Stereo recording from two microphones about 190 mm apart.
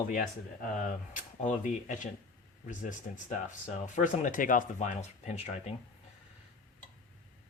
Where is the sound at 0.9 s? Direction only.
45° left (ahead or behind).